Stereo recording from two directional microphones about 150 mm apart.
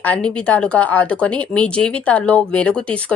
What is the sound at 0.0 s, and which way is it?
Speech, 10° left (ahead or behind).